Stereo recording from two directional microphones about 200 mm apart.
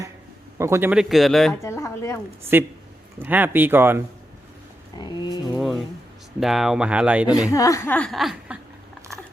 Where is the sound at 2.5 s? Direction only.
10° right (ahead or behind).